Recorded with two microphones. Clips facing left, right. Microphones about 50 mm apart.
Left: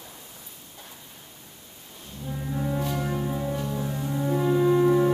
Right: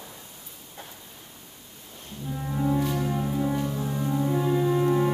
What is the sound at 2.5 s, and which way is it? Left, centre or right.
Music, centre.